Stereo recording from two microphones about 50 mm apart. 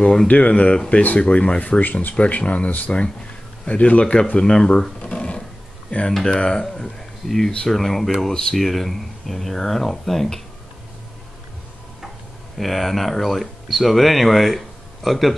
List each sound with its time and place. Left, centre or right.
0.3 s speech: left
1.6 s speech: left; by 4.9 s centre
5.0 s a sound: left
5.9 s speech: left
6.1 s speech: centre
12.5 s speech: centre